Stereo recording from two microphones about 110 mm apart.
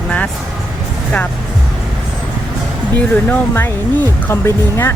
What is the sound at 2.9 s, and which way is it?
Speech, 20° left (ahead or behind).